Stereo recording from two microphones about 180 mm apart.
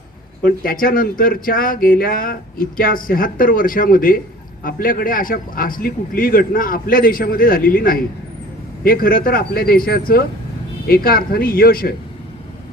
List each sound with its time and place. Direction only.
0.4 s a man's voice: 55° left (ahead or behind)